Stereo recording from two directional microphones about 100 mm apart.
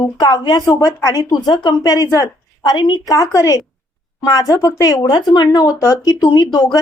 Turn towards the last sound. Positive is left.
turn(degrees=40)  # may be behind; listen again after turning